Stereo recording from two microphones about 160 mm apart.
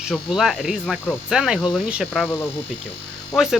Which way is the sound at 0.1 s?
Centre (ahead or behind).